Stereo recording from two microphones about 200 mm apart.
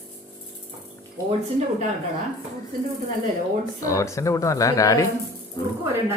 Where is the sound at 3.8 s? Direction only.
15° left (ahead or behind).